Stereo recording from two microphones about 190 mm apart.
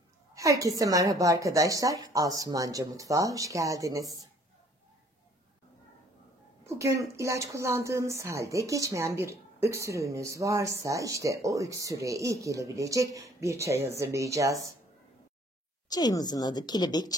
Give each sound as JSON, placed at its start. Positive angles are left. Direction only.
{"t": 0.3, "sound": "a woman's voice", "side_deg": -15}
{"t": 6.6, "sound": "a woman's voice", "side_deg": -15}
{"t": 15.9, "sound": "a woman's voice", "side_deg": 20}